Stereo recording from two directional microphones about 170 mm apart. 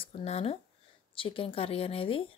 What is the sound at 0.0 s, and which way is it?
Speech, 35° left (ahead or behind).